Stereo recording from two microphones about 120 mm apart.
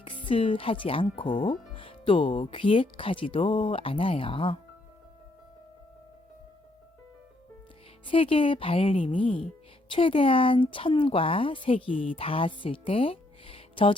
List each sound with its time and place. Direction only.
0.3 s speech: 50° left (ahead or behind)
8.0 s speech: 50° left (ahead or behind)